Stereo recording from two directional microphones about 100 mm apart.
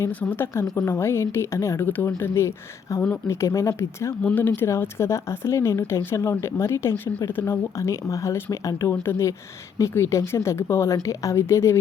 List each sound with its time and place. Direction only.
0.2 s speech: 20° left (ahead or behind)
4.2 s speech: 15° left (ahead or behind)